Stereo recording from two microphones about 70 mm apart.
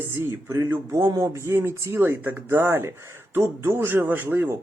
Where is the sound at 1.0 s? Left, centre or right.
Right.